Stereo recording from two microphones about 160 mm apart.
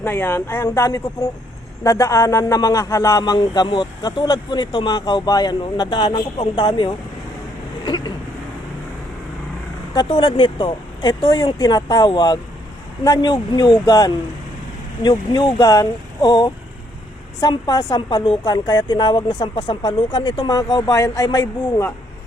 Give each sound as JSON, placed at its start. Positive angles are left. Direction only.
{"t": 0.0, "sound": "a woman's voice", "side_deg": 15}
{"t": 9.9, "sound": "a woman's voice", "side_deg": 30}